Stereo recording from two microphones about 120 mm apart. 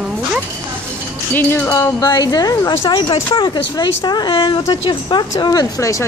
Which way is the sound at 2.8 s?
45° left (ahead or behind).